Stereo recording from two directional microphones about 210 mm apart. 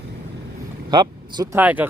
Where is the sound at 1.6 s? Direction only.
10° right (ahead or behind).